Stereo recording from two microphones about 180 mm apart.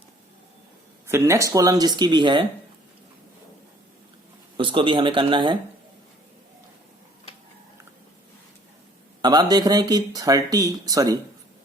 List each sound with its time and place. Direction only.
1.0 s speech: 15° right (ahead or behind)
4.5 s speech: 30° right (ahead or behind)
9.2 s speech: 20° right (ahead or behind)